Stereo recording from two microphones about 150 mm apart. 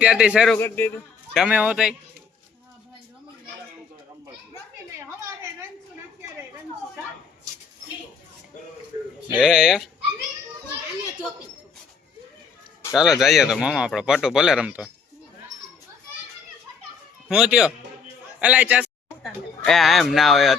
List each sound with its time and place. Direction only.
0.0 s speech: 5° right (ahead or behind)
0.5 s a man's voice: 15° left (ahead or behind)
1.5 s a man's voice: 10° right (ahead or behind)
9.3 s speech: 5° right (ahead or behind)
12.9 s speech: 5° right (ahead or behind)
17.2 s a man's voice: 5° right (ahead or behind)
19.2 s speech: centre (ahead or behind)